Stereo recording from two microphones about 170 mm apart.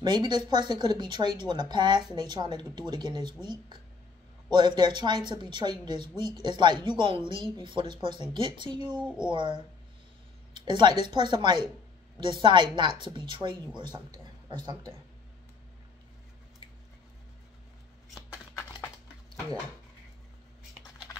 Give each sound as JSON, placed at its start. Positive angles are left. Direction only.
{"t": 0.0, "sound": "speech", "side_deg": -25}
{"t": 4.5, "sound": "speech", "side_deg": -25}
{"t": 9.0, "sound": "speech", "side_deg": -5}
{"t": 9.3, "sound": "speech", "side_deg": -30}
{"t": 18.3, "sound": "a sound", "side_deg": 20}